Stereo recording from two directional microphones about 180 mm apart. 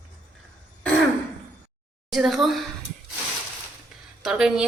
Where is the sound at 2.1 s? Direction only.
Centre (ahead or behind).